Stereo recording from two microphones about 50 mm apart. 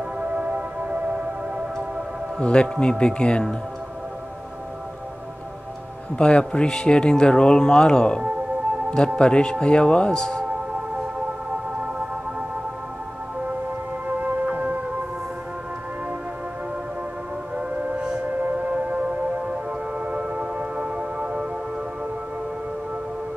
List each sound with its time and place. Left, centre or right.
0.2 s music: right
2.4 s speech: left
6.1 s a man's voice: centre
14.0 s music: right
17.6 s music: right
18.2 s singing bowl: right
18.7 s music: right